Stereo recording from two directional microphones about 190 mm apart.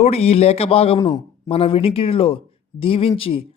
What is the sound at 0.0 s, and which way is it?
A man's voice, 35° left (ahead or behind).